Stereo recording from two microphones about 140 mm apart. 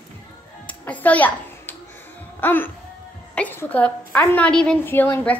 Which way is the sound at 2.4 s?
15° left (ahead or behind).